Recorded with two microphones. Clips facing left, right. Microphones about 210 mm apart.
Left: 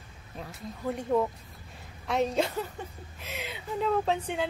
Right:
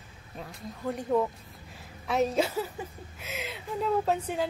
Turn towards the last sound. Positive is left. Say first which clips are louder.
# right 1 dB
turn(degrees=-5)  # may be behind; listen again after turning